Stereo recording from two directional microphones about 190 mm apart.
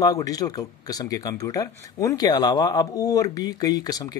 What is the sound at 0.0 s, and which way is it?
Speech, 20° left (ahead or behind).